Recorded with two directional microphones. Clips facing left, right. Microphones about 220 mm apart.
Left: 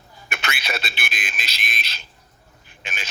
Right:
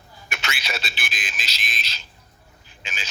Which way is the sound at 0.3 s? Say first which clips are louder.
Left 3 dB; 60° left (ahead or behind).